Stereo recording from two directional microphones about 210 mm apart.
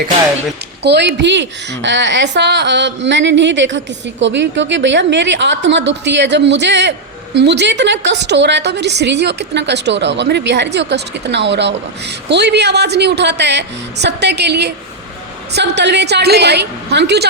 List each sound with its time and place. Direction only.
0.8 s a woman's voice: 55° right (ahead or behind)